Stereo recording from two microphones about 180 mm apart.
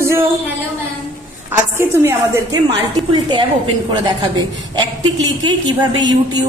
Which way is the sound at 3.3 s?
25° right (ahead or behind).